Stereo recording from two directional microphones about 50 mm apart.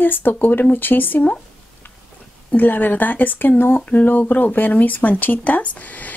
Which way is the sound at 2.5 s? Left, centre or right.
Left.